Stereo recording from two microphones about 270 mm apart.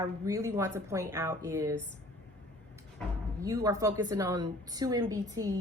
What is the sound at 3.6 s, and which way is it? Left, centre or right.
Speech, centre.